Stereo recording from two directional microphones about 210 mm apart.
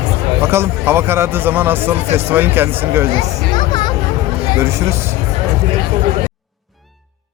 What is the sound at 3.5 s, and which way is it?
Music, 20° left (ahead or behind).